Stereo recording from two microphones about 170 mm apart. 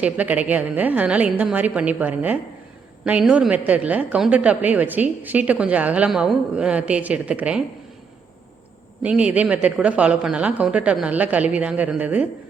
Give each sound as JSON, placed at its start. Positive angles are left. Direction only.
{"t": 0.0, "sound": "a woman's voice", "side_deg": -10}
{"t": 9.0, "sound": "a woman's voice", "side_deg": -10}